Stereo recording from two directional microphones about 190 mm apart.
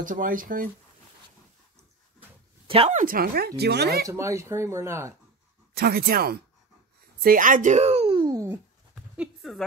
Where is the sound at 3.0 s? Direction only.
50° right (ahead or behind).